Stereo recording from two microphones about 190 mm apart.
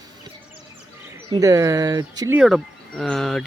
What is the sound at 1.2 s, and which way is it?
Speech, 15° right (ahead or behind).